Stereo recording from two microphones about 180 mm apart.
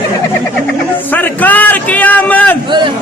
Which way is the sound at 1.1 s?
10° left (ahead or behind).